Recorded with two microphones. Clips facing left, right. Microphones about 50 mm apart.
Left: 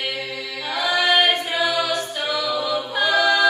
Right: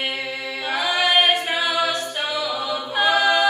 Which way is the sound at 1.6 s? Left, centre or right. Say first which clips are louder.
Even; right.